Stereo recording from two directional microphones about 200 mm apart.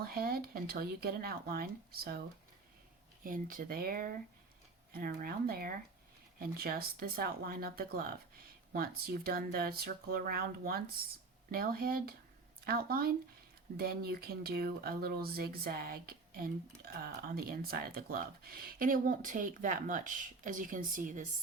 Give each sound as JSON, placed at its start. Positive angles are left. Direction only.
{"t": 0.0, "sound": "speech", "side_deg": -50}
{"t": 3.2, "sound": "speech", "side_deg": -45}